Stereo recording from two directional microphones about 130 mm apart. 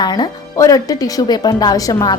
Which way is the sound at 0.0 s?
30° left (ahead or behind).